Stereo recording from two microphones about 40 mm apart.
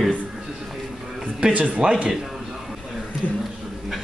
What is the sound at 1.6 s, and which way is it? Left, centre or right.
Speech, right.